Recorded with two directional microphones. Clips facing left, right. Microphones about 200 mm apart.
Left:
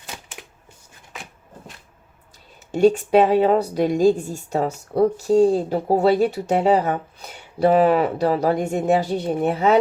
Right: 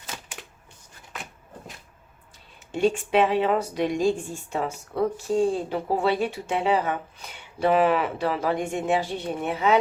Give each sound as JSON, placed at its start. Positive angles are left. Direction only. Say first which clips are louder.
{"t": 2.7, "sound": "a woman's voice", "louder": "left 6 dB", "side_deg": 40}